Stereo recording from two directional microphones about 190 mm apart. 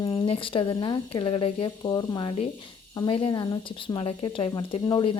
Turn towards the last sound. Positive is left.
turn(degrees=25)  # may be behind; listen again after turning